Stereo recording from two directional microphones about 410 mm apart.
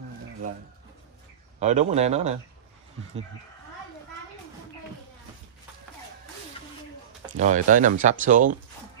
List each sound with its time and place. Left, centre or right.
1.6 s speech: centre
7.2 s speech: centre